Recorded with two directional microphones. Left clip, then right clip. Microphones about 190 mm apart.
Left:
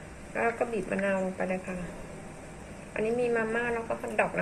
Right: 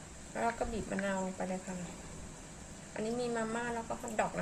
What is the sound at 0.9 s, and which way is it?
Speech, 25° right (ahead or behind).